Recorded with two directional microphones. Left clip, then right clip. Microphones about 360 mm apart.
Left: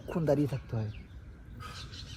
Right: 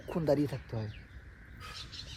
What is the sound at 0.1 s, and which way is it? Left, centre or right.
Speech, right.